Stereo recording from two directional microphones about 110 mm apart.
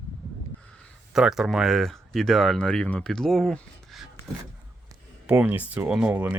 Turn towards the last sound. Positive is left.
turn(degrees=-15)  # may be behind; listen again after turning